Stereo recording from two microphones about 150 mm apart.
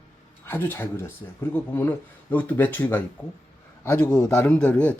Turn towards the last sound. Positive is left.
turn(degrees=10)  # may be behind; listen again after turning